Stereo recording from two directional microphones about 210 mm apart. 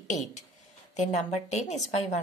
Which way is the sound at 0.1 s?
35° left (ahead or behind).